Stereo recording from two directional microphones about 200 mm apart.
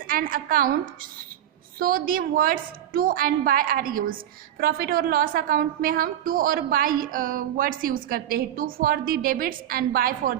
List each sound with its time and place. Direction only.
0.1 s a woman's voice: 45° right (ahead or behind)
1.8 s a woman's voice: 45° right (ahead or behind)